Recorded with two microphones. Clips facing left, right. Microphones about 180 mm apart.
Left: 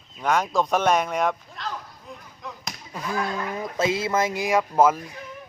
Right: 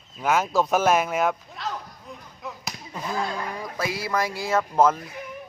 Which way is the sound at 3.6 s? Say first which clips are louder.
Left 5 dB; 25° left (ahead or behind).